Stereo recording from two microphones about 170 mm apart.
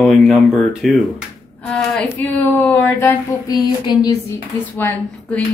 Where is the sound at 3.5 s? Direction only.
25° left (ahead or behind).